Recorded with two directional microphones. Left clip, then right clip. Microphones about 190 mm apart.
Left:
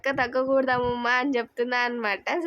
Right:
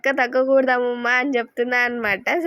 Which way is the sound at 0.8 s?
5° right (ahead or behind).